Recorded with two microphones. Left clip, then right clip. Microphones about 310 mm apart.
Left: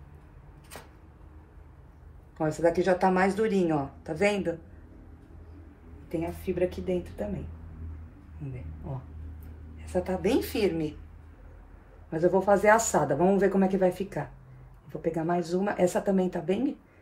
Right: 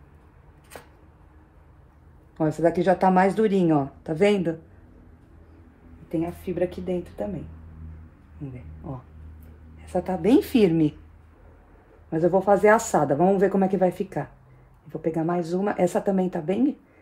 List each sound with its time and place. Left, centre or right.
2.3 s speech: right
6.0 s speech: right
9.9 s speech: right
12.1 s speech: right